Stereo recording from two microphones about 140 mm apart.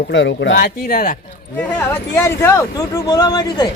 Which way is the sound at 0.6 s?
90° left.